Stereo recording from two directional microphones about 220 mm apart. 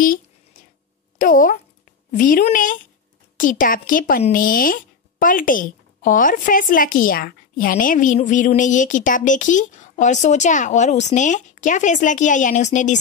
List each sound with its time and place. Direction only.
1.1 s a woman's voice: 35° left (ahead or behind)